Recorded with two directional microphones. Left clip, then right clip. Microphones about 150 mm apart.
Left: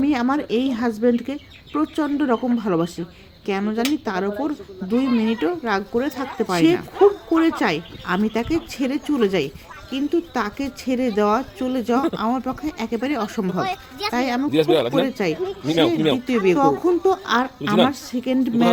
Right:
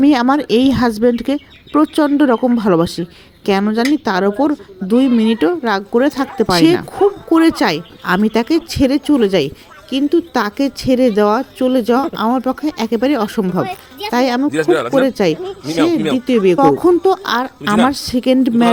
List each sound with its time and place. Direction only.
0.0 s speech: 50° right (ahead or behind)
14.5 s speech: 20° left (ahead or behind)
14.9 s speech: 35° right (ahead or behind)
16.6 s speech: 45° right (ahead or behind)